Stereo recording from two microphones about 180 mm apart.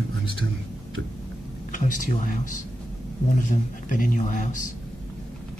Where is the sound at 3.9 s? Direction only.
45° left (ahead or behind).